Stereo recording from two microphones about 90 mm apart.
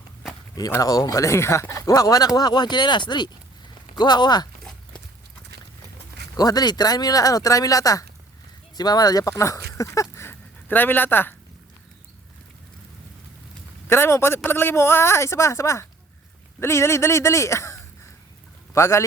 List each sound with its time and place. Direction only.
0.7 s speech: 40° left (ahead or behind)
1.7 s speech: 45° left (ahead or behind)
6.3 s speech: 45° left (ahead or behind); by 11.3 s 25° left (ahead or behind)
13.8 s a man's voice: 25° left (ahead or behind)